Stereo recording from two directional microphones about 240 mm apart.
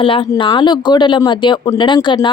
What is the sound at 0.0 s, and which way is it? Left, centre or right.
Speech, left.